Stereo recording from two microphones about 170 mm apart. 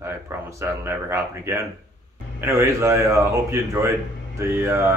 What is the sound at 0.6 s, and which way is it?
Speech, 15° right (ahead or behind).